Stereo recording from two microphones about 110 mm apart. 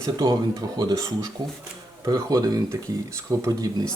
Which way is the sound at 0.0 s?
35° right (ahead or behind).